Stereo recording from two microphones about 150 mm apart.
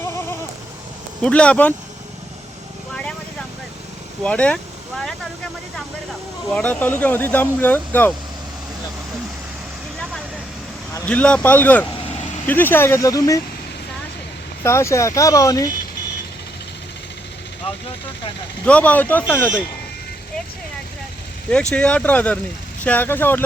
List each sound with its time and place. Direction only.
1.2 s speech: 5° left (ahead or behind)
2.9 s vehicle: 5° left (ahead or behind)
4.2 s speech: 5° left (ahead or behind)
6.5 s speech: 10° left (ahead or behind)
11.0 s speech: 10° left (ahead or behind)
14.6 s speech: 20° left (ahead or behind)
18.6 s speech: 10° left (ahead or behind)
21.5 s speech: 5° left (ahead or behind)